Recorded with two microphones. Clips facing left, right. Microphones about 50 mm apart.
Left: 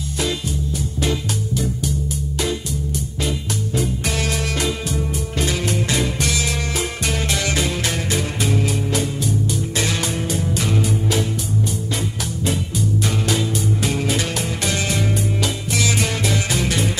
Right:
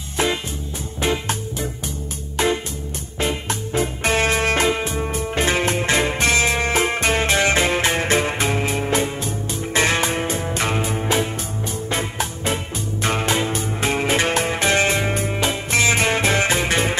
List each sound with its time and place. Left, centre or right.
1.0 s music: right